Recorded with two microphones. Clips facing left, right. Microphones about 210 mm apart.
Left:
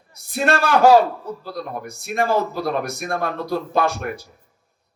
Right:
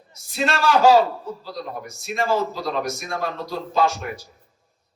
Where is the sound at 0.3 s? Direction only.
55° left (ahead or behind).